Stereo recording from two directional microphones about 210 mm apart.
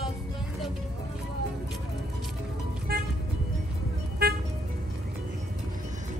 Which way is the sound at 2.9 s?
45° right (ahead or behind).